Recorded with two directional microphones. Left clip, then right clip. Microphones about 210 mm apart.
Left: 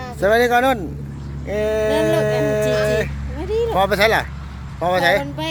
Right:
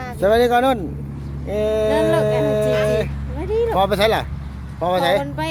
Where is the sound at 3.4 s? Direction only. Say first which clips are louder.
Right 1 dB; 15° left (ahead or behind).